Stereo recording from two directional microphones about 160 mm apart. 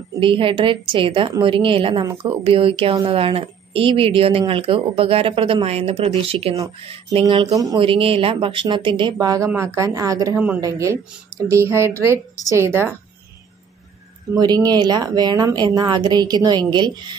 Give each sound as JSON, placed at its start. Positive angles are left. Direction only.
{"t": 0.2, "sound": "a woman's voice", "side_deg": -35}
{"t": 14.3, "sound": "speech", "side_deg": -25}